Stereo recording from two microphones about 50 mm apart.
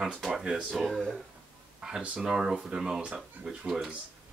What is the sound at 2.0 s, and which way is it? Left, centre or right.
Speech, right.